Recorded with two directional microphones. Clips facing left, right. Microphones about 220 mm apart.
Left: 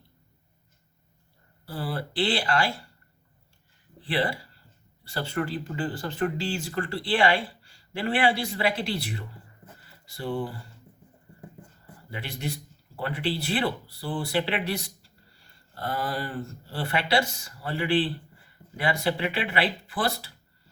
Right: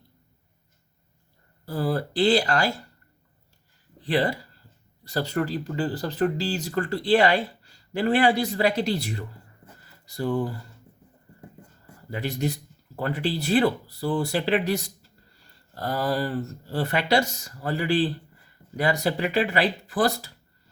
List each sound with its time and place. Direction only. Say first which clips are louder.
1.6 s speech: right 6 dB; 45° right (ahead or behind)
4.0 s speech: right 4 dB; 40° right (ahead or behind)
12.1 s speech: right 7 dB; 40° right (ahead or behind)